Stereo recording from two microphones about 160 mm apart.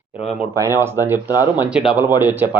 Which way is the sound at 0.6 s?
15° right (ahead or behind).